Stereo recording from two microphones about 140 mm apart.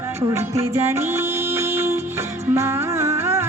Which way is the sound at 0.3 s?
20° right (ahead or behind).